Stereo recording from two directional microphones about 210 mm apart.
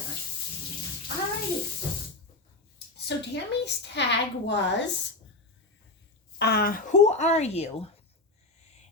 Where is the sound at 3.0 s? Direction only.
55° left (ahead or behind).